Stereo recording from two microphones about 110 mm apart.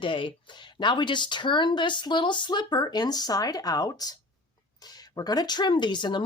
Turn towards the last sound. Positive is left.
turn(degrees=45)  # may be behind; listen again after turning